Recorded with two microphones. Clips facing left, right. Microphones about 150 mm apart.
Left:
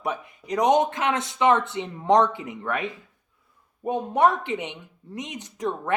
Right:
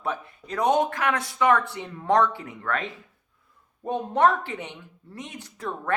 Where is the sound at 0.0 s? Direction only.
15° left (ahead or behind).